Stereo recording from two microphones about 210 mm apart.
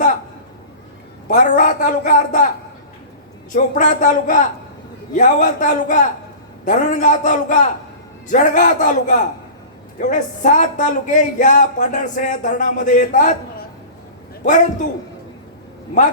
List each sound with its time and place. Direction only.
1.3 s speech: 35° left (ahead or behind)
3.5 s speech: 35° left (ahead or behind)